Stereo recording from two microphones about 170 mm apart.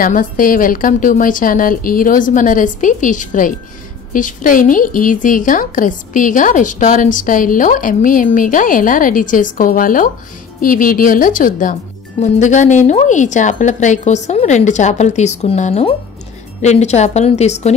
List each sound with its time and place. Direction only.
0.0 s a woman's voice: 55° left (ahead or behind)